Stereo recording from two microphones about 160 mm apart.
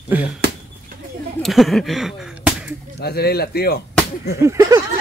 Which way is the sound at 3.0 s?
80° left.